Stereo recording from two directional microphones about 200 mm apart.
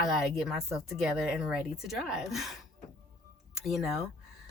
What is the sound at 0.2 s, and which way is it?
Speech, centre (ahead or behind).